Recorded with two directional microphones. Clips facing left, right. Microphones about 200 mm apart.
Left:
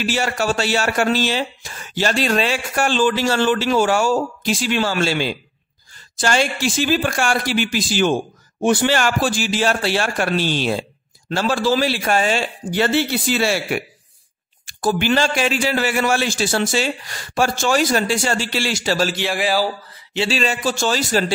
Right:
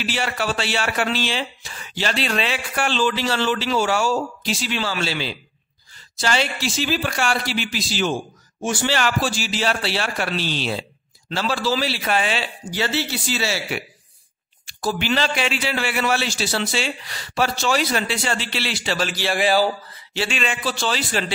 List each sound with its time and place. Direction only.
0.0 s speech: 45° left (ahead or behind)
19.3 s a sound: 5° left (ahead or behind)
20.2 s a man's voice: 35° left (ahead or behind)